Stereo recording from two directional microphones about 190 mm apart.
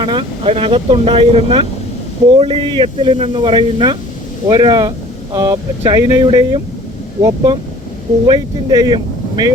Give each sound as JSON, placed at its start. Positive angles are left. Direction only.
{"t": 0.0, "sound": "speech", "side_deg": -25}